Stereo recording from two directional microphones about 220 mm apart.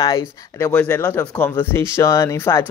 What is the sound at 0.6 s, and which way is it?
Speech, 5° left (ahead or behind).